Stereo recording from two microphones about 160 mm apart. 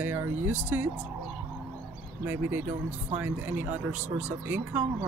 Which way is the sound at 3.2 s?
10° right (ahead or behind).